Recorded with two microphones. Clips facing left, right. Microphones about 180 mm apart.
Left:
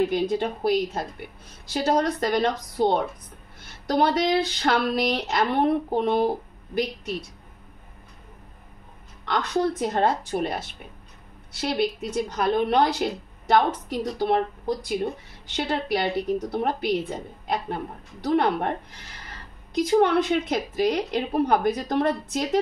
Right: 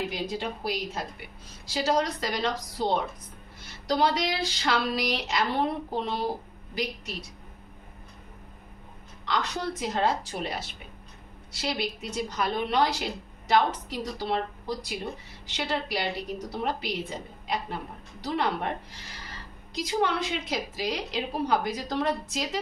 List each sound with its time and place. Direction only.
0.1 s a woman's voice: 55° left (ahead or behind)
9.2 s a woman's voice: 55° left (ahead or behind)
18.2 s a woman's voice: 55° left (ahead or behind)